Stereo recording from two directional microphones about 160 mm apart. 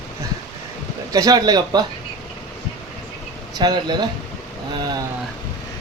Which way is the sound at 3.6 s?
25° right (ahead or behind).